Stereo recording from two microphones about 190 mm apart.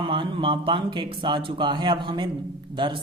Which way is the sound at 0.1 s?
25° right (ahead or behind).